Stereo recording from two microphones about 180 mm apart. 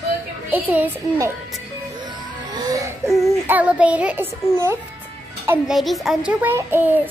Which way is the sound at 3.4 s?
10° right (ahead or behind).